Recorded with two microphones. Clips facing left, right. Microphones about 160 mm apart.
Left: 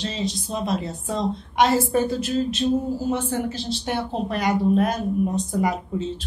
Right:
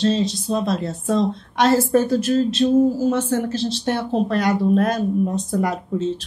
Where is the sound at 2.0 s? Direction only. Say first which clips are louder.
Right 5 dB; 75° right (ahead or behind).